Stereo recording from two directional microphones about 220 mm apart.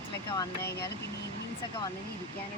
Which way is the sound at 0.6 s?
50° left (ahead or behind).